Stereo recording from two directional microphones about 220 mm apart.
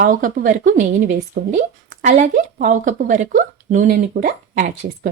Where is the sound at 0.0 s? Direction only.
35° right (ahead or behind).